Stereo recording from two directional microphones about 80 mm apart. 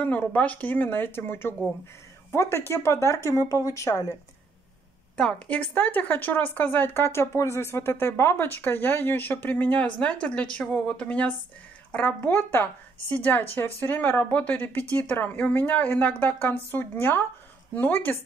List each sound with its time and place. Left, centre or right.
0.0 s speech: centre; by 4.0 s left
5.1 s a woman's voice: centre
12.2 s speech: left